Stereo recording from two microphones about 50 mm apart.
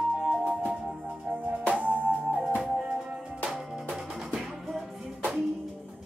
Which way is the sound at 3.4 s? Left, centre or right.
Centre.